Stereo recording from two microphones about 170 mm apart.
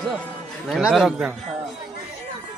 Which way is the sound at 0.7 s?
Centre (ahead or behind).